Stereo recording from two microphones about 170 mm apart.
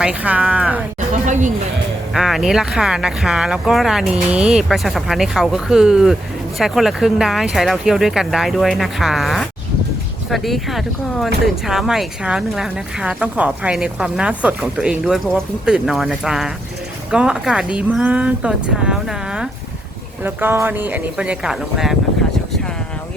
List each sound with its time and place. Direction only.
0.0 s speech: 5° right (ahead or behind)
0.9 s a sound: 45° right (ahead or behind)
2.1 s speech: centre (ahead or behind)